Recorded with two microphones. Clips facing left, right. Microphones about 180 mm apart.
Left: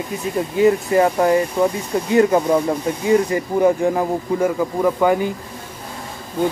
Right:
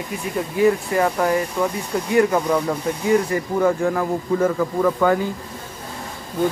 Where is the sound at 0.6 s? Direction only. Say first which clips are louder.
Left 3 dB; 25° left (ahead or behind).